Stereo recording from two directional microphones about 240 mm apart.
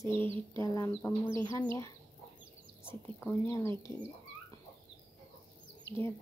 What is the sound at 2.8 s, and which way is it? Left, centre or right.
Speech, centre.